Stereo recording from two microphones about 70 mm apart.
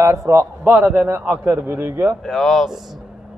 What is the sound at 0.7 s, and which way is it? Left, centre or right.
A man's voice, right.